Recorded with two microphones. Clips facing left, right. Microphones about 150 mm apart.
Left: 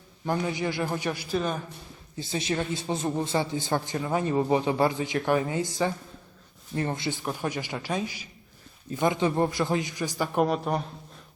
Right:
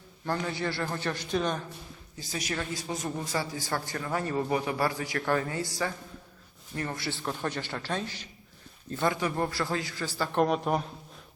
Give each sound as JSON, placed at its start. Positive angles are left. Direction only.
{"t": 0.3, "sound": "a man's voice", "side_deg": 15}
{"t": 2.1, "sound": "a man's voice", "side_deg": 25}
{"t": 10.4, "sound": "speech", "side_deg": 0}